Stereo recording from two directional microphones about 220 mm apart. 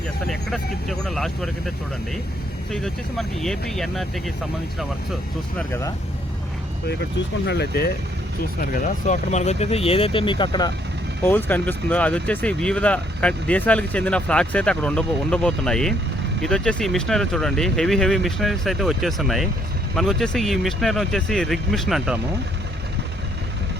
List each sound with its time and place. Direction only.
0.3 s speech: centre (ahead or behind)
2.7 s speech: centre (ahead or behind)
7.4 s speech: 50° left (ahead or behind)
8.7 s speech: 35° left (ahead or behind)
11.2 s speech: 10° left (ahead or behind)